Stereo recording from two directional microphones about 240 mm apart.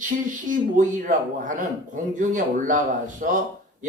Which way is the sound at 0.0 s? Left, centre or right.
Right.